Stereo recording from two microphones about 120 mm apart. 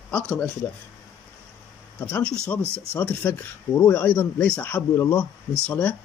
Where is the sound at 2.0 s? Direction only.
15° left (ahead or behind).